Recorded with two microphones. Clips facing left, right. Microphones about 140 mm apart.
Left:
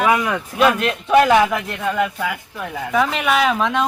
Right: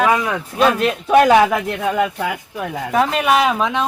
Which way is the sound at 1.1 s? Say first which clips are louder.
Right 2 dB; 35° right (ahead or behind).